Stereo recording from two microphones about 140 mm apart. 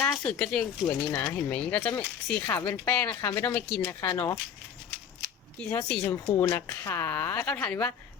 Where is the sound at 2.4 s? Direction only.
20° left (ahead or behind).